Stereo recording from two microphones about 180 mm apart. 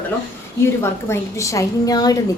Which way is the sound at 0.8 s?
15° left (ahead or behind).